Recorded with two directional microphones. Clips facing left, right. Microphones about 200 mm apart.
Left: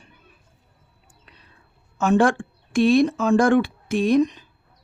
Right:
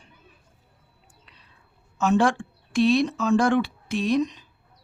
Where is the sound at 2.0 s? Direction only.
55° left (ahead or behind).